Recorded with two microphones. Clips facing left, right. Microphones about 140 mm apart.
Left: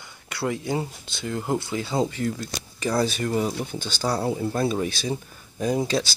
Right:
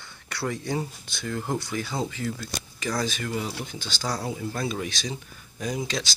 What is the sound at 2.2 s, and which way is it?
Speech, 40° left (ahead or behind).